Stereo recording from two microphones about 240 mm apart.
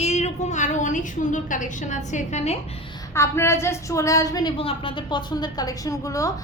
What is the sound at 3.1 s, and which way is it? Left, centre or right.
A woman's voice, centre.